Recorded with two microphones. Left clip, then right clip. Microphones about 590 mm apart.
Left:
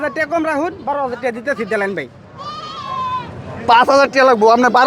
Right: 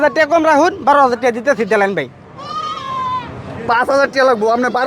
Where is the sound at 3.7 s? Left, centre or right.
Left.